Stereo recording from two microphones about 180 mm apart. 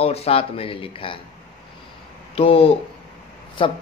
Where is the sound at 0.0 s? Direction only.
35° left (ahead or behind).